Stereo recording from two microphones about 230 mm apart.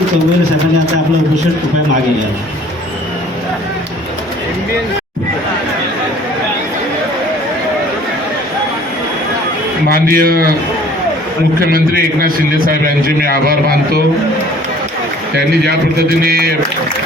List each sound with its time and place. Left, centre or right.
9.9 s a man's voice: right
11.6 s a man's voice: right
15.6 s a man's voice: right